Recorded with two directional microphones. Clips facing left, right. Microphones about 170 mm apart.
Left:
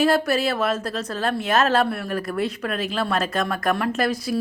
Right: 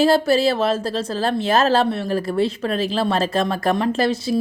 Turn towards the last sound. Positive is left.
turn(degrees=-25)  # may be behind; listen again after turning